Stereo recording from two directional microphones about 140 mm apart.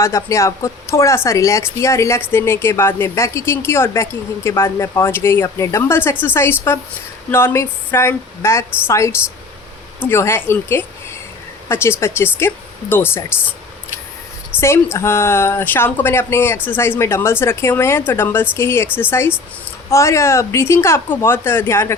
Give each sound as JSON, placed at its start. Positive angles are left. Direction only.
{"t": 0.0, "sound": "a woman's voice", "side_deg": 20}
{"t": 14.6, "sound": "a woman's voice", "side_deg": 20}